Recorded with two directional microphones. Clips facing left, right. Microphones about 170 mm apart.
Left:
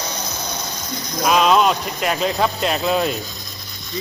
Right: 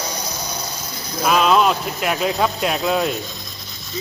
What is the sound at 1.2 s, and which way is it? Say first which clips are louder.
Speech: even; 5° right (ahead or behind).